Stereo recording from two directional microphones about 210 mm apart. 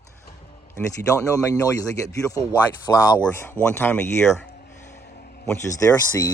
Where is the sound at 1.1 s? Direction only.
15° left (ahead or behind).